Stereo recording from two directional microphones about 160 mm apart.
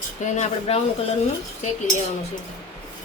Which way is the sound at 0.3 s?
45° left (ahead or behind).